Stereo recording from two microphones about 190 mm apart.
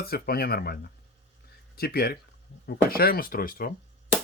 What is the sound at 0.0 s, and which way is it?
Speech, 55° left (ahead or behind).